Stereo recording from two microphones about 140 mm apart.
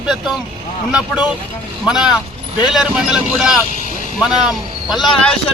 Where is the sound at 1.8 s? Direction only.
5° right (ahead or behind).